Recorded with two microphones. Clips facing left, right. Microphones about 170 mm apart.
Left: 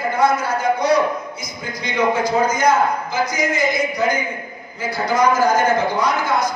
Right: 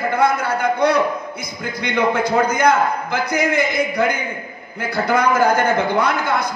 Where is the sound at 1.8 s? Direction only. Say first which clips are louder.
Even; 60° right (ahead or behind).